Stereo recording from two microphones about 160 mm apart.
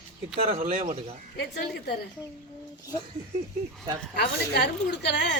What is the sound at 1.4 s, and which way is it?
Speech, 90° left.